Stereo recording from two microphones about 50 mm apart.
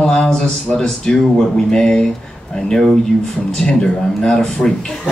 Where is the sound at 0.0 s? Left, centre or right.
Centre.